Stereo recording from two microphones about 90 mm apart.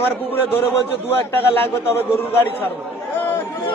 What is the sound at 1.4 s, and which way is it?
Speech, 25° left (ahead or behind).